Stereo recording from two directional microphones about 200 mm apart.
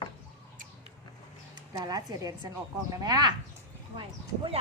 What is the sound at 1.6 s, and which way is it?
Speech, 20° right (ahead or behind).